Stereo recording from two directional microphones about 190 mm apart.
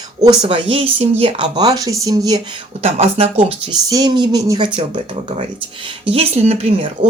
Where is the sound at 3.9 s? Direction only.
20° right (ahead or behind).